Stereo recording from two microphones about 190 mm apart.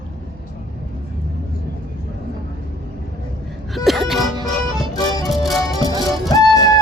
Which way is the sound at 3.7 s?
Centre (ahead or behind).